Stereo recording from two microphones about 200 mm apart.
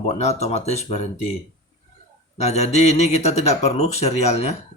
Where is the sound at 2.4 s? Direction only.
35° left (ahead or behind).